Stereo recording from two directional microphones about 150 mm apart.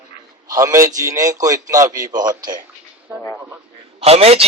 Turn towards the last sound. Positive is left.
turn(degrees=-40)  # may be behind; listen again after turning